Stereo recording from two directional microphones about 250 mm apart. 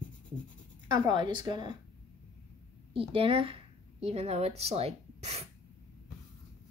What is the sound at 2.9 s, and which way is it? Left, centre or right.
A woman's voice, right.